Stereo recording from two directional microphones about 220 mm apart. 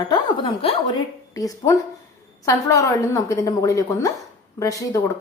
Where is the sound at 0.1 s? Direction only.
25° left (ahead or behind).